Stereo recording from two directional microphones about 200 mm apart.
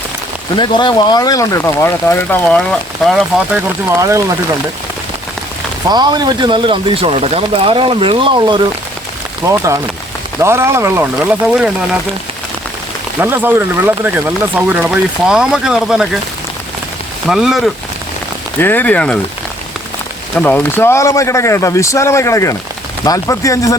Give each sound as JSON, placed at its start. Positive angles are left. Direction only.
{"t": 0.5, "sound": "speech", "side_deg": 25}
{"t": 3.9, "sound": "speech", "side_deg": -15}
{"t": 5.9, "sound": "speech", "side_deg": -20}
{"t": 13.1, "sound": "speech", "side_deg": -10}
{"t": 17.2, "sound": "speech", "side_deg": 0}
{"t": 18.6, "sound": "speech", "side_deg": 10}
{"t": 20.3, "sound": "speech", "side_deg": 10}